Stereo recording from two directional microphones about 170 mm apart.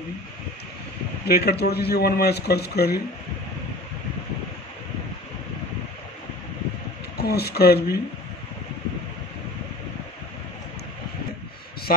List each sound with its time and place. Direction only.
1.2 s a man's voice: 70° left (ahead or behind)
7.2 s a man's voice: 70° left (ahead or behind)